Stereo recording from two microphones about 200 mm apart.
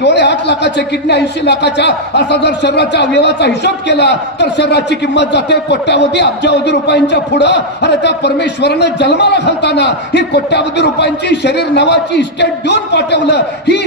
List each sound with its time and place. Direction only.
0.0 s speech: 60° left (ahead or behind)